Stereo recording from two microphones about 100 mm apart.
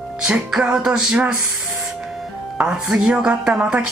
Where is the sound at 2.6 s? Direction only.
10° right (ahead or behind).